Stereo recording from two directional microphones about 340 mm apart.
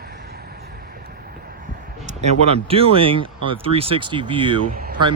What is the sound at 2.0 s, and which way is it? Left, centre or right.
Speech, centre.